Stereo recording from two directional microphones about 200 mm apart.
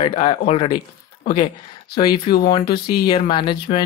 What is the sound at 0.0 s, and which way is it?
Speech, 30° left (ahead or behind).